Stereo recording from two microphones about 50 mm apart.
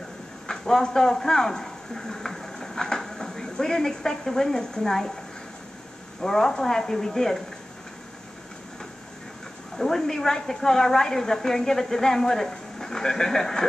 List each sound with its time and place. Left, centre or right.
0.5 s a man's voice: centre
6.2 s a woman's voice: centre
9.8 s a woman's voice: centre